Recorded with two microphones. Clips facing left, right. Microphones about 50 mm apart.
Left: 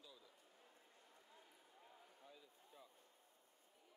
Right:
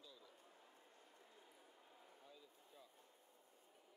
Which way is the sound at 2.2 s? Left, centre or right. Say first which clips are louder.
Even; centre.